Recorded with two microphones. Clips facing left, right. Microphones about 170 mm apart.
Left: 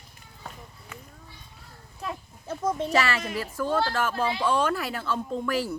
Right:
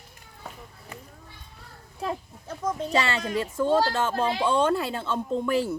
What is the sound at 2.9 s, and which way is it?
Speech, 25° right (ahead or behind).